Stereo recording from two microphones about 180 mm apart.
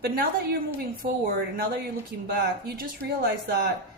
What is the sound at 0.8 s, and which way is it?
Speech, 60° right (ahead or behind).